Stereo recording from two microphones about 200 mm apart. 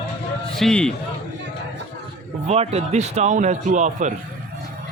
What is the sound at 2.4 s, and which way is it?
A man's voice, 30° right (ahead or behind).